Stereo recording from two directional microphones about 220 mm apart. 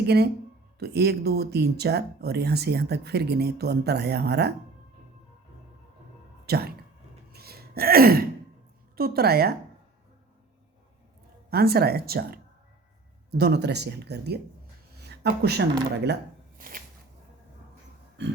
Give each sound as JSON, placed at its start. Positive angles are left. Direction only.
{"t": 0.0, "sound": "speech", "side_deg": -45}
{"t": 6.4, "sound": "music", "side_deg": -45}
{"t": 7.3, "sound": "a sound", "side_deg": -45}
{"t": 9.0, "sound": "speech", "side_deg": -45}
{"t": 11.5, "sound": "speech", "side_deg": -45}
{"t": 14.9, "sound": "a sound", "side_deg": -50}